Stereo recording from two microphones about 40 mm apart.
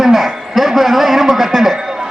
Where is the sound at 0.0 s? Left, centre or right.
Centre.